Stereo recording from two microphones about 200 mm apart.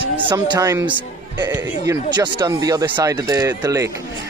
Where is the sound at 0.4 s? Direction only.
20° right (ahead or behind).